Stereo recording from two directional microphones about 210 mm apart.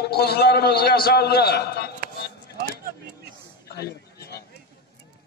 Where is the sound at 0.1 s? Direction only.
50° left (ahead or behind).